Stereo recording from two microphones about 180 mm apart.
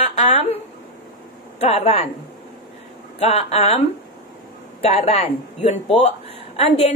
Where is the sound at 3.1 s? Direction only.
35° left (ahead or behind).